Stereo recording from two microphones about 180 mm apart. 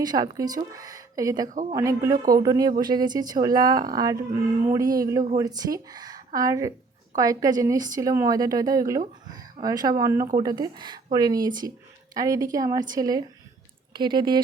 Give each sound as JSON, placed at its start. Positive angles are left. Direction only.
{"t": 0.0, "sound": "speech", "side_deg": -20}
{"t": 9.3, "sound": "a sound", "side_deg": -20}
{"t": 10.0, "sound": "speech", "side_deg": -15}